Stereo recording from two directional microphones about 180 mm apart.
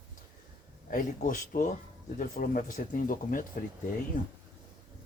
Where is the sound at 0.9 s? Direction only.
50° left (ahead or behind).